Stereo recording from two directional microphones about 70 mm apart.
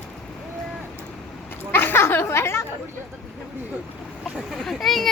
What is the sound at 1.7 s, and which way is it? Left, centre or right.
Speech, left.